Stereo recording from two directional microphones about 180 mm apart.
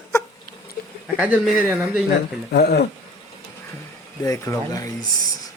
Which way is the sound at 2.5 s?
60° left (ahead or behind).